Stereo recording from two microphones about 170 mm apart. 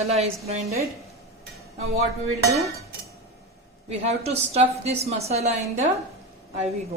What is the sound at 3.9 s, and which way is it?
A woman's voice, 40° right (ahead or behind).